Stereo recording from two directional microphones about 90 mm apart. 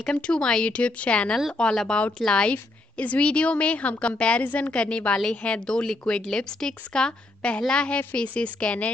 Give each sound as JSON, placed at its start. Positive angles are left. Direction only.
{"t": 0.0, "sound": "a woman's voice", "side_deg": 10}